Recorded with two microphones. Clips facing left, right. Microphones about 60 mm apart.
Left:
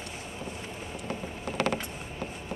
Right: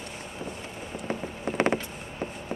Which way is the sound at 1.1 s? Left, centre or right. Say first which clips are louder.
Right 5 dB; right.